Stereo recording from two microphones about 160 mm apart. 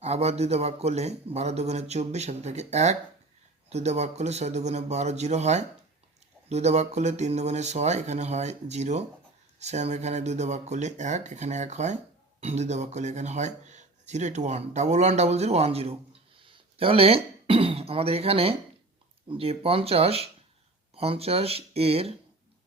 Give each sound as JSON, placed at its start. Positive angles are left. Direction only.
{"t": 0.0, "sound": "speech", "side_deg": -40}